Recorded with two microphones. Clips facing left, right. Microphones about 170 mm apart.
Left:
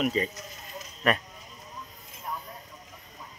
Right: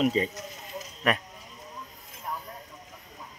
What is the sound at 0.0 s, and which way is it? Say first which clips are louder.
Speech: right 2 dB; 25° right (ahead or behind).